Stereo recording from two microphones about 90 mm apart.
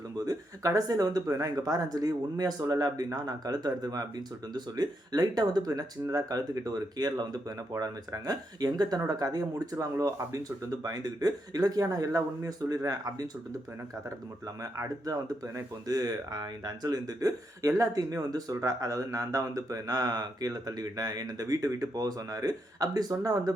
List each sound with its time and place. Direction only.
0.3 s speech: 40° right (ahead or behind)
14.4 s speech: 40° right (ahead or behind)